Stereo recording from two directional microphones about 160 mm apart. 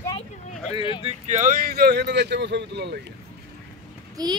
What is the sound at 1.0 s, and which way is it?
Speech, 45° right (ahead or behind).